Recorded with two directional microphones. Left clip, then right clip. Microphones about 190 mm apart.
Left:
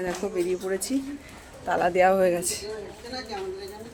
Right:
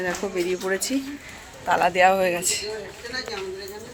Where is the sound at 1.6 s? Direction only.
30° left (ahead or behind).